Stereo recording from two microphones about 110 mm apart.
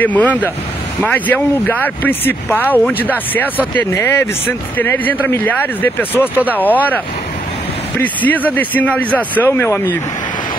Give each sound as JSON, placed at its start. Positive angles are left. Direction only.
{"t": 0.0, "sound": "speech", "side_deg": 15}
{"t": 8.0, "sound": "speech", "side_deg": 15}